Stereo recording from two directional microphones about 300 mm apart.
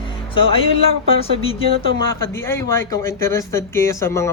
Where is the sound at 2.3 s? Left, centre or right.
Centre.